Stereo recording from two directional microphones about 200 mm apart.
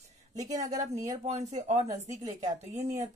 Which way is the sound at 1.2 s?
35° right (ahead or behind).